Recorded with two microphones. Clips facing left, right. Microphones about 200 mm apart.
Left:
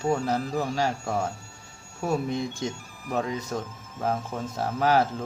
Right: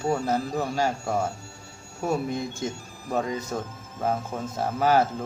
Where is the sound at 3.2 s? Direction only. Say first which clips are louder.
Right 1 dB; centre (ahead or behind).